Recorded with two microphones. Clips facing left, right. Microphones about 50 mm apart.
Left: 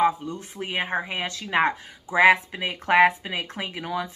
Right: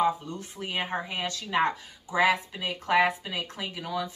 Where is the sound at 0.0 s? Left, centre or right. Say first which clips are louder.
Left 4 dB; left.